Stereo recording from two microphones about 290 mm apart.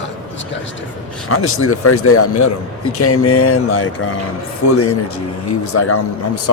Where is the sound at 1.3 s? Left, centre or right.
Left.